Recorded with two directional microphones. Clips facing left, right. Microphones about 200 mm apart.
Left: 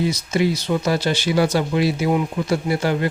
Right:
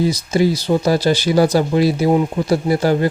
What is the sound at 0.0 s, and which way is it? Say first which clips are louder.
Speech: right 4 dB; 35° right (ahead or behind).